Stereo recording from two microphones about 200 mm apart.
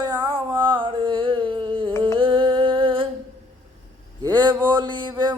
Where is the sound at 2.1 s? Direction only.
25° right (ahead or behind).